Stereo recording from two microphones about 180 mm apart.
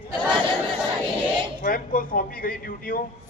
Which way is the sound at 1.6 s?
50° left (ahead or behind).